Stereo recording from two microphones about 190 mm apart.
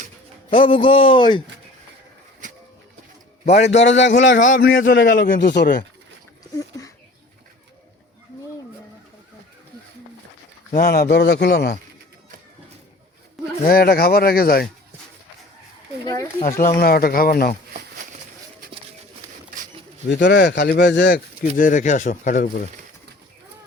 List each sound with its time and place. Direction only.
0.5 s speech: 25° left (ahead or behind)
3.7 s a man's voice: 75° left (ahead or behind)
5.2 s speech: 45° left (ahead or behind)
6.4 s a sound: 15° left (ahead or behind)
10.7 s speech: 50° left (ahead or behind)
13.7 s speech: 55° left (ahead or behind)
16.4 s speech: 40° left (ahead or behind)
20.1 s speech: 65° left (ahead or behind)
21.5 s speech: 45° left (ahead or behind)